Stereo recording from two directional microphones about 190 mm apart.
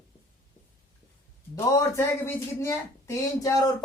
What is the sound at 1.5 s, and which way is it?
Speech, 15° left (ahead or behind).